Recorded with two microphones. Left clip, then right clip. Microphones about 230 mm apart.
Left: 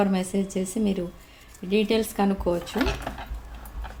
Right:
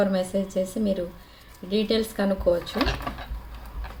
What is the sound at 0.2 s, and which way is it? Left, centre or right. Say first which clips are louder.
Speech: right 3 dB; left.